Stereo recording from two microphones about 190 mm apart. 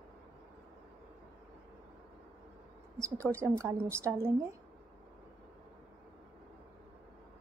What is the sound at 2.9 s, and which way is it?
A woman's voice, 15° right (ahead or behind).